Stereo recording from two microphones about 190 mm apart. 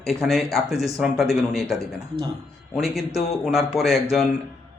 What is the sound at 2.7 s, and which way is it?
Speech, centre (ahead or behind).